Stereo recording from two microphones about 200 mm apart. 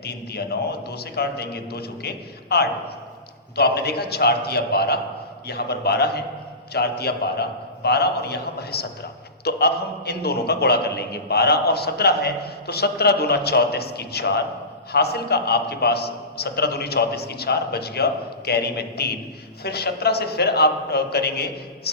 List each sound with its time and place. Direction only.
0.0 s a man's voice: 55° left (ahead or behind)